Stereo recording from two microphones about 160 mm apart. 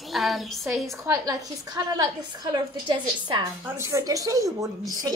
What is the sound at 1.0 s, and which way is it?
A woman's voice, 20° right (ahead or behind).